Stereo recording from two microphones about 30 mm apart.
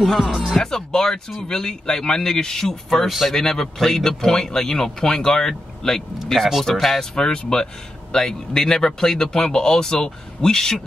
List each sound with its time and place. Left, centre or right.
0.0 s speech: centre
0.6 s speech: centre
3.1 s speech: centre
3.3 s speech: centre
7.2 s speech: left